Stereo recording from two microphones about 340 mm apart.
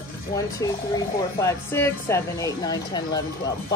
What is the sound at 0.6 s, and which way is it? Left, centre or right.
Speech, centre.